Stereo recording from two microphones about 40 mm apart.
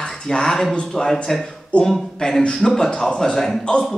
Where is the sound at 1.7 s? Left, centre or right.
Left.